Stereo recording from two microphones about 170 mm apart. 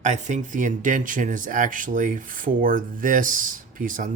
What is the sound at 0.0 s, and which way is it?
Speech, 45° right (ahead or behind).